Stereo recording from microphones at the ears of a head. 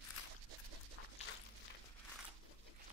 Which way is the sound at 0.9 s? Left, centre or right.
Left.